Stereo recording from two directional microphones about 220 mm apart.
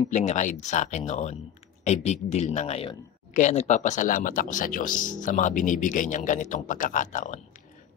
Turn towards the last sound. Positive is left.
turn(degrees=35)  # may be behind; listen again after turning